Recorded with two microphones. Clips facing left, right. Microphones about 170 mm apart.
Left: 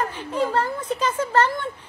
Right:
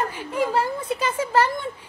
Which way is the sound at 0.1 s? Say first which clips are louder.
Even; 10° right (ahead or behind).